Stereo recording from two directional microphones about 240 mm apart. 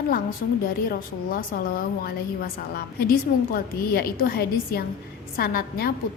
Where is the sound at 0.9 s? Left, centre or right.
Left.